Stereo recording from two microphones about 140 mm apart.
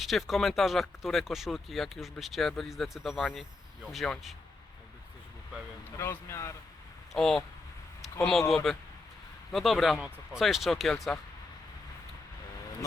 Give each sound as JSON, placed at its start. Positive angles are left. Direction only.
{"t": 0.0, "sound": "speech", "side_deg": 0}
{"t": 6.0, "sound": "speech", "side_deg": 20}
{"t": 7.2, "sound": "speech", "side_deg": 0}